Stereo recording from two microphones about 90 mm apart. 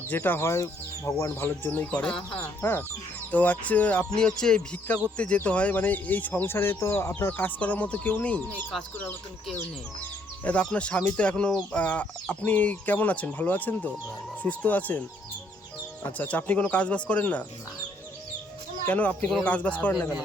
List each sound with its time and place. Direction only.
0.1 s speech: 25° left (ahead or behind)
2.6 s speech: 25° left (ahead or behind)
10.4 s speech: 10° left (ahead or behind)
16.1 s speech: 15° left (ahead or behind)
18.9 s speech: 15° left (ahead or behind)